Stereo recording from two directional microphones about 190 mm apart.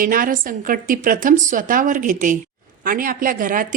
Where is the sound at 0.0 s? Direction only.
45° right (ahead or behind).